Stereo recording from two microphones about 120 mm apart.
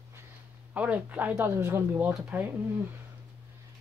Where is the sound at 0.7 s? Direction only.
10° right (ahead or behind).